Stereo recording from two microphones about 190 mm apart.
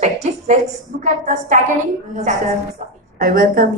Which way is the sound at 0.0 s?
35° right (ahead or behind).